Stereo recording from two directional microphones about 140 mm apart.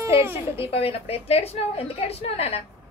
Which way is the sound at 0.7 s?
45° left (ahead or behind).